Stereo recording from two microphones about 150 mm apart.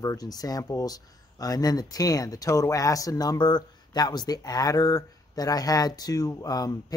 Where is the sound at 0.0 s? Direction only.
25° left (ahead or behind).